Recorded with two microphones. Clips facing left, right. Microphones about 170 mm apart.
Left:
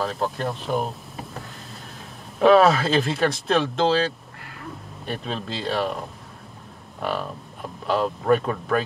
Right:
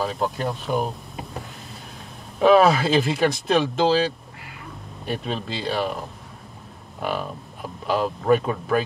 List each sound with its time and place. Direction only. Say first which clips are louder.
0.0 s speech: right 1 dB; centre (ahead or behind)
2.3 s speech: even; centre (ahead or behind)